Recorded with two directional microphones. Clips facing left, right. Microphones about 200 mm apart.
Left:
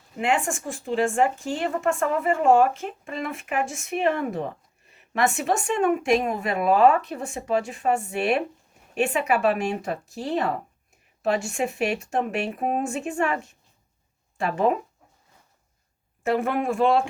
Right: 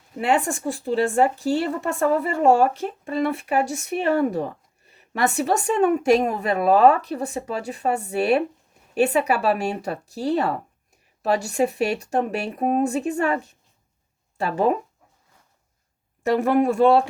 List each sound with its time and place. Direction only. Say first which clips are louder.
0.2 s speech: right 3 dB; 35° right (ahead or behind)
16.6 s speech: right 6 dB; 35° right (ahead or behind)